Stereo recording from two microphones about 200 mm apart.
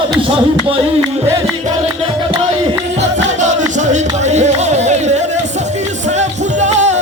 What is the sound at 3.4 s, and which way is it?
Music, 35° right (ahead or behind).